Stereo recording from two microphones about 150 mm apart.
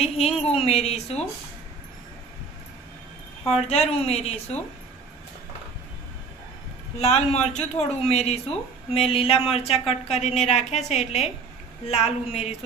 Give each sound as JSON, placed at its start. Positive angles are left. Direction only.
{"t": 0.0, "sound": "speech", "side_deg": 45}
{"t": 3.5, "sound": "speech", "side_deg": 45}
{"t": 7.0, "sound": "speech", "side_deg": 45}